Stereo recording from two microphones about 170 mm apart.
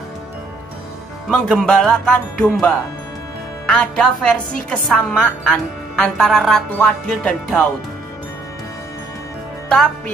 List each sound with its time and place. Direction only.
1.3 s a woman's voice: 5° left (ahead or behind)
9.7 s a woman's voice: 5° left (ahead or behind)